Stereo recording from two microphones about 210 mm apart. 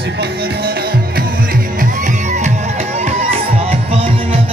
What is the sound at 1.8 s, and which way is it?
Music, 40° right (ahead or behind).